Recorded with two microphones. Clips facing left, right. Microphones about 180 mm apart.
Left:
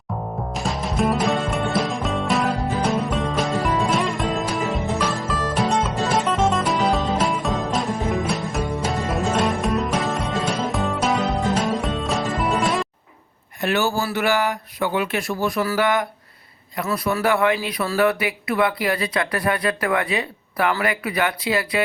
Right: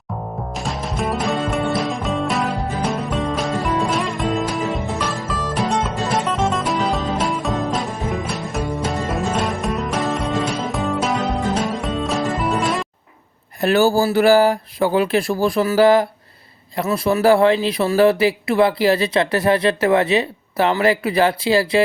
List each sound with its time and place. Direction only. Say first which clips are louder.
0.5 s music: left 2 dB; centre (ahead or behind)
13.6 s speech: right 6 dB; 35° right (ahead or behind)